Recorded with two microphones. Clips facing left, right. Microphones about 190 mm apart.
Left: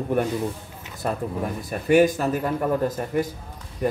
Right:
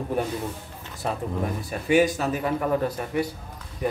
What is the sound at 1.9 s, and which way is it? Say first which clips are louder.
A man's voice: left 3 dB; 45° left (ahead or behind).